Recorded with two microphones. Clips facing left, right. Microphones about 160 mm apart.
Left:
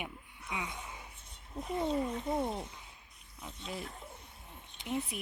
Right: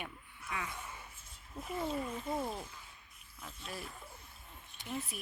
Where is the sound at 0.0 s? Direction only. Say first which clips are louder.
Left 3 dB; 15° left (ahead or behind).